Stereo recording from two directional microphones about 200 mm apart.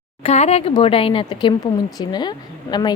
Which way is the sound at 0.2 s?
35° left (ahead or behind).